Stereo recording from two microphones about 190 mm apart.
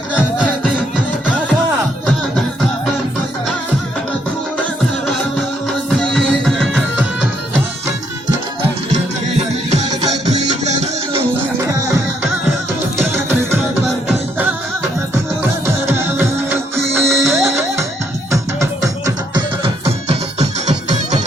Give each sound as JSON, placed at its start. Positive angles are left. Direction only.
{"t": 6.0, "sound": "music", "side_deg": 5}
{"t": 10.6, "sound": "music", "side_deg": -35}
{"t": 15.9, "sound": "music", "side_deg": -10}
{"t": 19.6, "sound": "music", "side_deg": -30}